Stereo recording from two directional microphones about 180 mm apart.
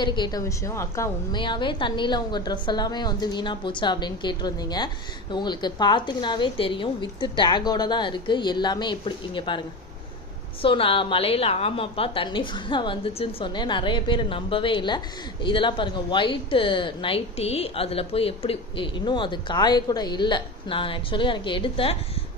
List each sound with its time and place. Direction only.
0.0 s a woman's voice: 25° left (ahead or behind)
1.4 s a woman's voice: 25° left (ahead or behind)
10.6 s a woman's voice: 30° left (ahead or behind)